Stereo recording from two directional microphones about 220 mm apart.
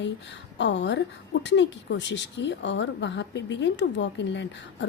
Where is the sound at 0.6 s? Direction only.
55° left (ahead or behind).